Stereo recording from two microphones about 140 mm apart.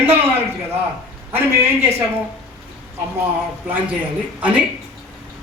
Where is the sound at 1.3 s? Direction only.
15° right (ahead or behind).